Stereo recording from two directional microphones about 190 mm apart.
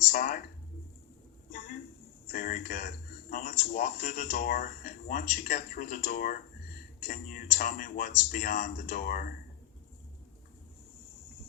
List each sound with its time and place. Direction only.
0.1 s speech: 45° left (ahead or behind)
2.3 s speech: 50° left (ahead or behind)